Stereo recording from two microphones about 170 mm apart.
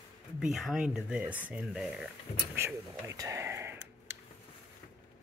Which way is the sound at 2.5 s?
15° right (ahead or behind).